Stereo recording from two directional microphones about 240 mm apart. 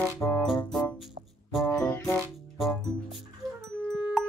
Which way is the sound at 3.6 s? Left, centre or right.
Centre.